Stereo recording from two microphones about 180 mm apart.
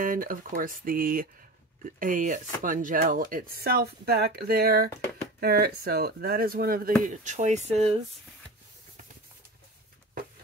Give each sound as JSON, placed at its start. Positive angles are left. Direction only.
{"t": 0.0, "sound": "speech", "side_deg": -50}
{"t": 7.1, "sound": "speech", "side_deg": -45}